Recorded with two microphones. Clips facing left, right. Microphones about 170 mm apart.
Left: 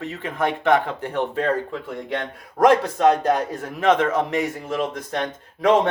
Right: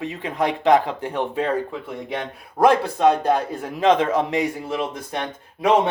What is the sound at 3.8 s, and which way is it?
Speech, 20° right (ahead or behind).